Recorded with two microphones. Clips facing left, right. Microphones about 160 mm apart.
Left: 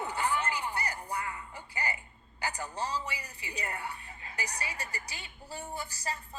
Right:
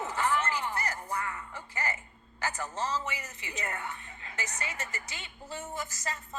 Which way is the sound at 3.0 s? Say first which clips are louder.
Right 2 dB; 35° left (ahead or behind).